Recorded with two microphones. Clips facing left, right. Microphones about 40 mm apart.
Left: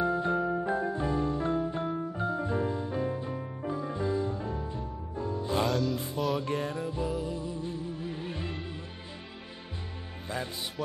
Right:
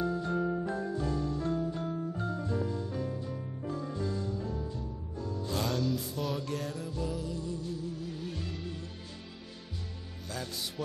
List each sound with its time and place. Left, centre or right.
0.0 s music: left
5.7 s music: centre
6.4 s music: left
10.2 s music: left